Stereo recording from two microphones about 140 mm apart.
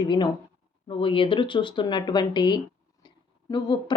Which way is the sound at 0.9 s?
40° left (ahead or behind).